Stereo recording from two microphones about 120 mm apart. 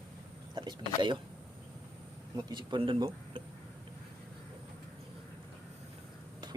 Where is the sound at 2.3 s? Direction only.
40° right (ahead or behind).